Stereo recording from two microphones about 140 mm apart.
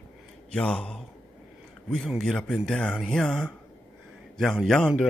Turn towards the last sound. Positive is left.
turn(degrees=0)  # may be behind; listen again after turning